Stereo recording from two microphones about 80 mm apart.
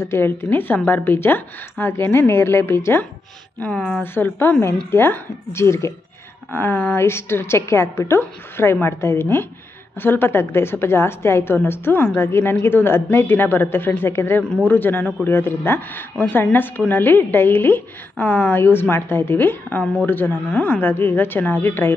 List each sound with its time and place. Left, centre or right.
0.0 s a woman's voice: left
3.6 s a woman's voice: centre
4.0 s a woman's voice: left